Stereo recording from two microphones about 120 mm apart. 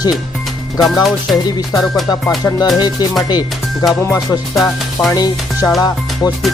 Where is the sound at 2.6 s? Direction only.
35° left (ahead or behind).